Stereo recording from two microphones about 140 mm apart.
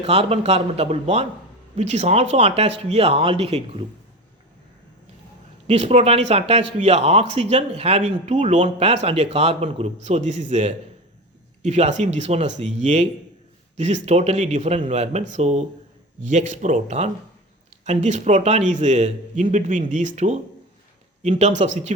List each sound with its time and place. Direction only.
0.0 s a man's voice: 45° right (ahead or behind)
5.6 s a man's voice: 50° right (ahead or behind)